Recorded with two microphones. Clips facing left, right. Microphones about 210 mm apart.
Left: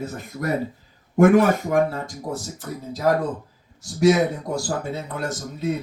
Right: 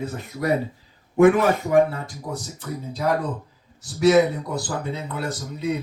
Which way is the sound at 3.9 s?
45° left (ahead or behind).